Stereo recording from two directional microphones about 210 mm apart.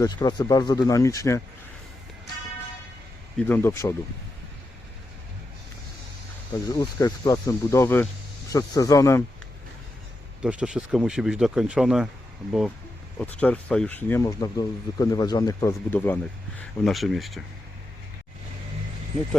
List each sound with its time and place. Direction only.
0.0 s speech: 20° left (ahead or behind)
3.3 s speech: 10° left (ahead or behind)
6.7 s speech: 15° left (ahead or behind)
10.4 s speech: 5° right (ahead or behind)